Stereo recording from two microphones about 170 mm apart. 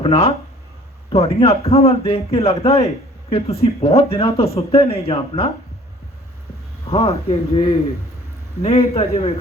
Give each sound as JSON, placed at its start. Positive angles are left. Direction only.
{"t": 0.0, "sound": "a man's voice", "side_deg": 35}
{"t": 6.8, "sound": "a man's voice", "side_deg": 35}